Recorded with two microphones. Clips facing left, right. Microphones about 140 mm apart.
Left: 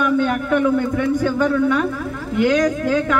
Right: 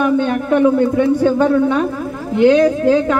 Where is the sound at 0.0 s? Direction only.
30° right (ahead or behind).